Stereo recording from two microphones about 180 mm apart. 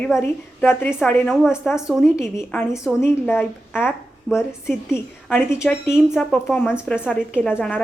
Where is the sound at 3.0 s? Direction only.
10° left (ahead or behind).